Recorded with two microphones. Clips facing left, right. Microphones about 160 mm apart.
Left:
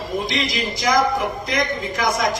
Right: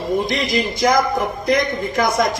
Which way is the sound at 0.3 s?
55° right (ahead or behind).